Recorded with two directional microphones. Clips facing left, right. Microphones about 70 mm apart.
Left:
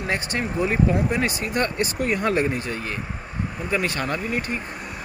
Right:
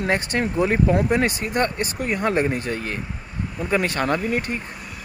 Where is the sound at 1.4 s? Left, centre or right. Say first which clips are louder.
Right 1 dB; right.